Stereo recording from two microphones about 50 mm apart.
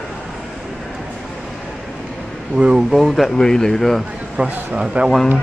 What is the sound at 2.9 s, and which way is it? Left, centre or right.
Speech, centre.